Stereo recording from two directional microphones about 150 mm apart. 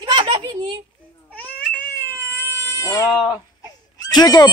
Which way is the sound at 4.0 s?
25° left (ahead or behind).